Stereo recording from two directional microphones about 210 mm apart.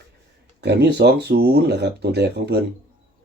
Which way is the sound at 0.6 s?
55° right (ahead or behind).